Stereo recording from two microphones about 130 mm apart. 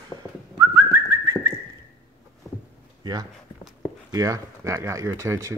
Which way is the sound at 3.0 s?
30° right (ahead or behind).